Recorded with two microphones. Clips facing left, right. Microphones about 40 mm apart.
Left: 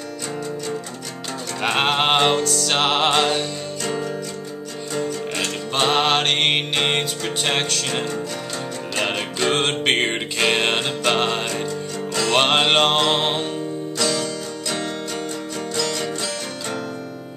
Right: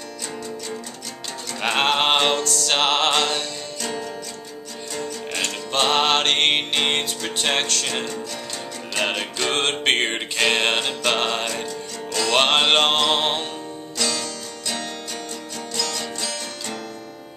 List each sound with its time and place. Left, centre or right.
1.6 s music: centre
5.3 s music: centre
14.2 s music: centre